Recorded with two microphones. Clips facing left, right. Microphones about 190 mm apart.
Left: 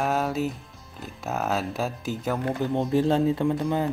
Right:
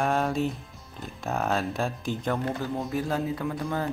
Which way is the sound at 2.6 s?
25° left (ahead or behind).